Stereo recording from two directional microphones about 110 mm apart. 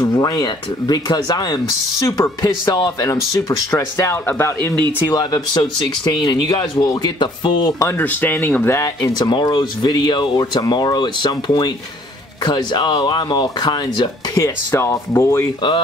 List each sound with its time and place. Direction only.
0.0 s speech: 35° left (ahead or behind)
2.7 s speech: 35° left (ahead or behind)
3.4 s speech: 25° left (ahead or behind)
5.1 s speech: 40° left (ahead or behind)
7.8 s speech: 20° left (ahead or behind)
9.1 s speech: 45° left (ahead or behind)
14.4 s speech: 25° left (ahead or behind)